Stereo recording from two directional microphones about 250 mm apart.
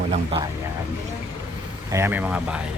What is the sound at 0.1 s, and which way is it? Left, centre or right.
Speech, right.